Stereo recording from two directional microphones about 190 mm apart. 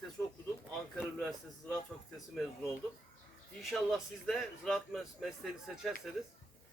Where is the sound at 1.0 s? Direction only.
Centre (ahead or behind).